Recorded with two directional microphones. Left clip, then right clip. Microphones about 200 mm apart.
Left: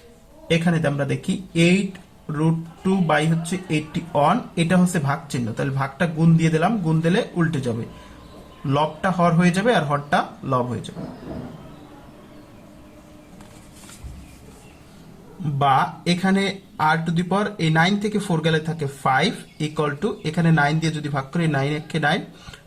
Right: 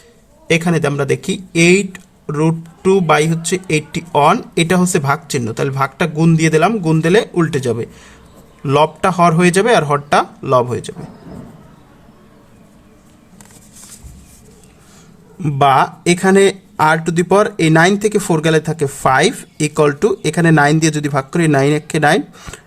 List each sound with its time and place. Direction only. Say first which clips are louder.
0.6 s speech: right 6 dB; 50° right (ahead or behind)
2.2 s speech: right 8 dB; 50° right (ahead or behind)
15.4 s speech: right 7 dB; 45° right (ahead or behind)